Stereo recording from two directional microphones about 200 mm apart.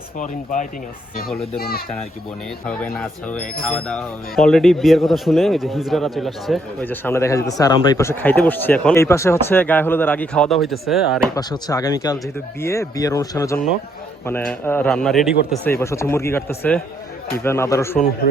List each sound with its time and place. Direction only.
0.2 s speech: 40° left (ahead or behind)
2.6 s speech: 5° left (ahead or behind)
11.3 s speech: 20° left (ahead or behind); by 15.4 s centre (ahead or behind)
15.8 s speech: 15° left (ahead or behind)